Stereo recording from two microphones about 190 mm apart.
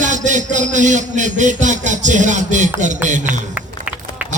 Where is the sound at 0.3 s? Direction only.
40° right (ahead or behind).